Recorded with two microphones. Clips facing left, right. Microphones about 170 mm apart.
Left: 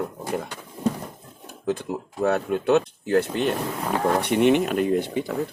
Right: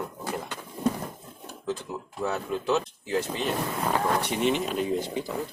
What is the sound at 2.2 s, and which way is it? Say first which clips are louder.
Speech: left 7 dB; 65° left (ahead or behind).